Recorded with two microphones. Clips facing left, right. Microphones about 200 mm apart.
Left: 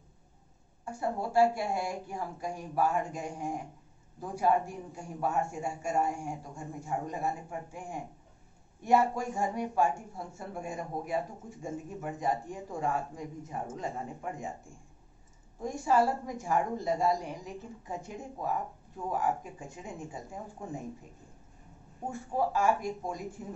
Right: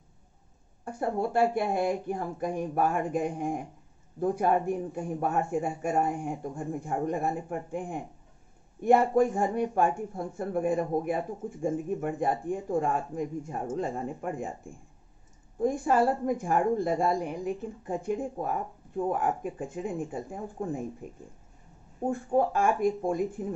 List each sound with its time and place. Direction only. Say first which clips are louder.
0.8 s speech: right 4 dB; 55° right (ahead or behind)
15.6 s speech: right 3 dB; 55° right (ahead or behind)
22.1 s speech: right 5 dB; 55° right (ahead or behind)